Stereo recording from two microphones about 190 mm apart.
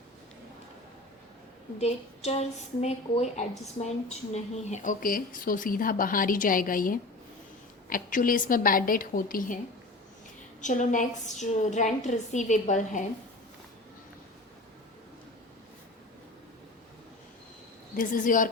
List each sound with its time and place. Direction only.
1.8 s a woman's voice: 35° left (ahead or behind)
10.6 s a woman's voice: 40° left (ahead or behind)
17.9 s a woman's voice: 45° left (ahead or behind)